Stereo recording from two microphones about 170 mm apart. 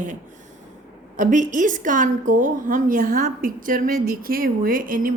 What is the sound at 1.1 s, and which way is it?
A woman's voice, 50° right (ahead or behind).